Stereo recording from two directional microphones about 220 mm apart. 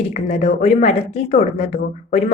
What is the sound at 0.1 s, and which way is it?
A woman's voice, 30° left (ahead or behind).